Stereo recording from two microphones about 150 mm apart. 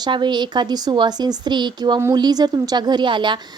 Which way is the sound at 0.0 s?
30° right (ahead or behind).